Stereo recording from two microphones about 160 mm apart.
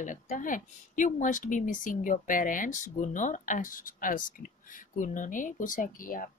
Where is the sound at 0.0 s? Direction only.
55° left (ahead or behind).